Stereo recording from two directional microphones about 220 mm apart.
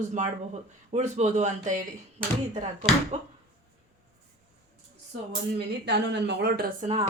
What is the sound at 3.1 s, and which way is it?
Speech, 30° right (ahead or behind).